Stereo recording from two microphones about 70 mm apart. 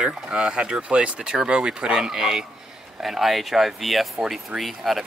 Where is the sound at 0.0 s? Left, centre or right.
Centre.